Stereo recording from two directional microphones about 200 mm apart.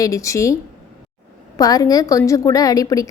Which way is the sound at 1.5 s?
20° left (ahead or behind).